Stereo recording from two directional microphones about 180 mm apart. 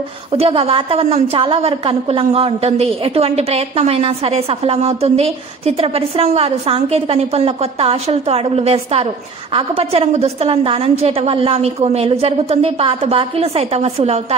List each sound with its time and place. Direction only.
0.3 s a woman's voice: 30° right (ahead or behind)